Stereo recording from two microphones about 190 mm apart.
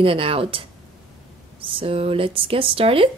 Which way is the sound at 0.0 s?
30° right (ahead or behind).